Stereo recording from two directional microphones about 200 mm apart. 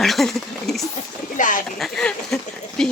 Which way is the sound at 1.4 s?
40° left (ahead or behind).